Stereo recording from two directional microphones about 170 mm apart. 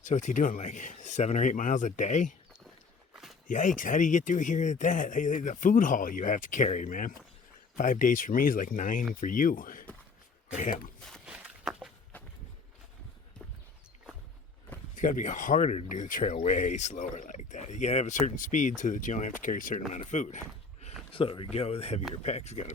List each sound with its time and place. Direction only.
0.0 s speech: 45° left (ahead or behind)
3.4 s speech: 50° left (ahead or behind)
11.3 s a sound: 5° right (ahead or behind)
14.9 s speech: 50° left (ahead or behind)
21.1 s speech: 30° left (ahead or behind)